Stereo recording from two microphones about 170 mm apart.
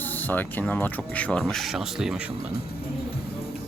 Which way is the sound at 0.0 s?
10° left (ahead or behind).